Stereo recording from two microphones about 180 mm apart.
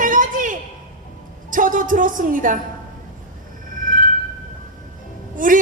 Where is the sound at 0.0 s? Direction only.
45° right (ahead or behind).